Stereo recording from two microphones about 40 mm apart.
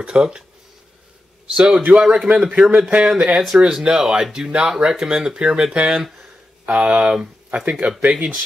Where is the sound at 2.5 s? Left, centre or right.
Right.